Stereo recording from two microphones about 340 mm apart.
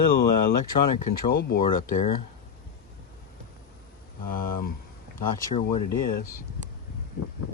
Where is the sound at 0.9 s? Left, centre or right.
Left.